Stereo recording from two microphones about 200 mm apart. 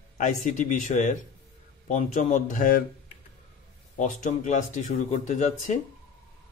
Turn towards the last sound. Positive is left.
turn(degrees=35)  # may be behind; listen again after turning